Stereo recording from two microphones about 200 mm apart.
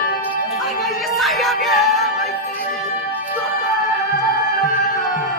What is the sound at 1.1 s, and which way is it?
Music, centre (ahead or behind).